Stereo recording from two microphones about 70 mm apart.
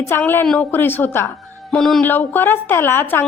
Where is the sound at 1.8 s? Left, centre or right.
Centre.